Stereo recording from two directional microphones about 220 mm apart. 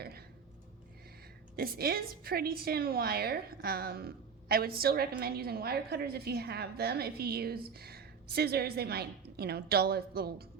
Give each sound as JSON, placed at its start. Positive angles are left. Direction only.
{"t": 1.5, "sound": "a woman's voice", "side_deg": -45}